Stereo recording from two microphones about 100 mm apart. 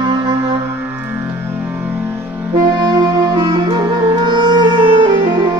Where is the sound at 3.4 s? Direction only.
50° right (ahead or behind).